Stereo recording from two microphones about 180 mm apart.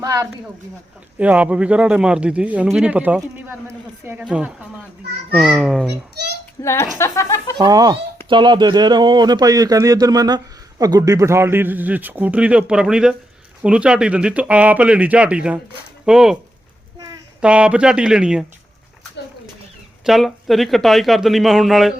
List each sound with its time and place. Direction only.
0.0 s speech: 20° right (ahead or behind)
1.2 s a man's voice: 5° right (ahead or behind)
6.6 s speech: 15° left (ahead or behind)
7.6 s a man's voice: 20° right (ahead or behind); by 16.4 s 5° right (ahead or behind)
17.4 s a man's voice: 5° right (ahead or behind)
20.1 s a man's voice: centre (ahead or behind)